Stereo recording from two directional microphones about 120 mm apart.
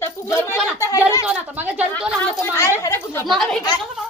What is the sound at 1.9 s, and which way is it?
A woman's voice, 15° left (ahead or behind).